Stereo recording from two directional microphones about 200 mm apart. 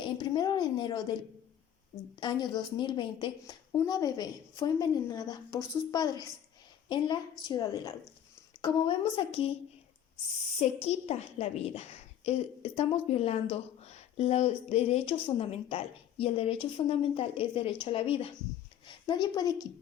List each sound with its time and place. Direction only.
0.0 s a sound: 20° left (ahead or behind)
2.2 s a woman's voice: 20° left (ahead or behind)
10.6 s a woman's voice: 30° left (ahead or behind)